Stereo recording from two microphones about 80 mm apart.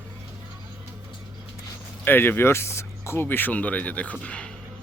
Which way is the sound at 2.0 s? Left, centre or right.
Left.